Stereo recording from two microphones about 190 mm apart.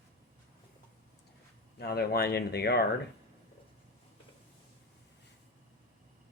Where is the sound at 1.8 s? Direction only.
55° left (ahead or behind).